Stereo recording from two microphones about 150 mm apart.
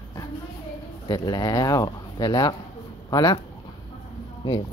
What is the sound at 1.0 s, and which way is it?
Speech, 25° left (ahead or behind).